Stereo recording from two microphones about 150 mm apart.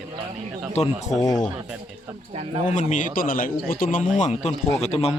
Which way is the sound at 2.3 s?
45° right (ahead or behind).